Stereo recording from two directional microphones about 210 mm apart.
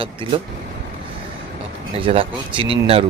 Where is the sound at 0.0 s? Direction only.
25° right (ahead or behind).